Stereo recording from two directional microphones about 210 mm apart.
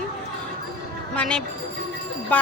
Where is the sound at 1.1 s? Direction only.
5° left (ahead or behind).